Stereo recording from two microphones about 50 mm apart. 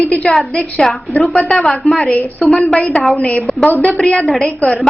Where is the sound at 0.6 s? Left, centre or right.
Centre.